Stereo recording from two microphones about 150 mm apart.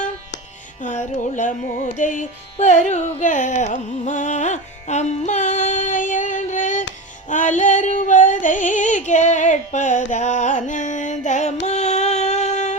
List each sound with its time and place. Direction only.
0.8 s music: 55° left (ahead or behind)
2.0 s carnatic music: 60° left (ahead or behind)
7.3 s music: 55° left (ahead or behind)